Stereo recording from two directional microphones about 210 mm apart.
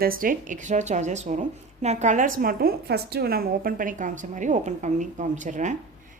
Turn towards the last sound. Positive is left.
turn(degrees=-35)  # may be behind; listen again after turning